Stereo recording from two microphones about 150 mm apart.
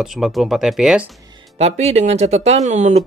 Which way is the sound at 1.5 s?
45° right (ahead or behind).